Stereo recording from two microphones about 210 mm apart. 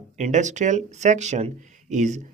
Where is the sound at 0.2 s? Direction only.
35° right (ahead or behind).